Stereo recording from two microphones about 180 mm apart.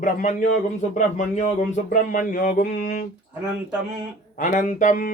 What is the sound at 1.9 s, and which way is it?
Speech, 45° left (ahead or behind).